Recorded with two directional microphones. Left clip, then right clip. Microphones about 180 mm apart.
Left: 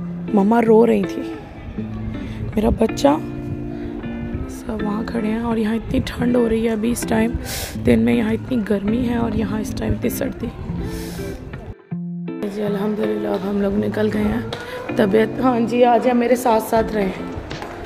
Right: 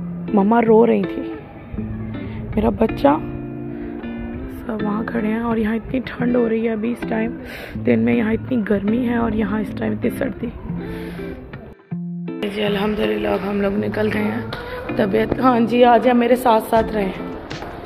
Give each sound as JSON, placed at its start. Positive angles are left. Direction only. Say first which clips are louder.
{"t": 0.4, "sound": "speech", "louder": "even", "side_deg": 25}
{"t": 2.5, "sound": "speech", "louder": "even", "side_deg": 20}
{"t": 4.8, "sound": "speech", "louder": "right 1 dB", "side_deg": 15}
{"t": 7.8, "sound": "speech", "louder": "even", "side_deg": 25}
{"t": 12.4, "sound": "music", "louder": "right 3 dB", "side_deg": 15}
{"t": 13.6, "sound": "speech", "louder": "even", "side_deg": 25}
{"t": 15.5, "sound": "a woman's voice", "louder": "right 2 dB", "side_deg": 0}